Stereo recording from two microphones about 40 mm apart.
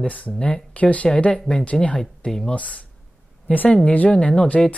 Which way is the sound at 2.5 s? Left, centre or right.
Left.